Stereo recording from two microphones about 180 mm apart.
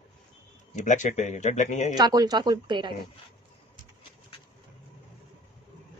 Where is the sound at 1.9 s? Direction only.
20° right (ahead or behind).